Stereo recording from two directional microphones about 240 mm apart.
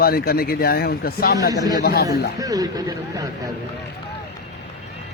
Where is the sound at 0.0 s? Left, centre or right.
Left.